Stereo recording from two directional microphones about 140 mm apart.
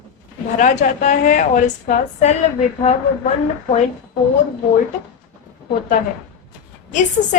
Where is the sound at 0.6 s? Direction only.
65° left (ahead or behind).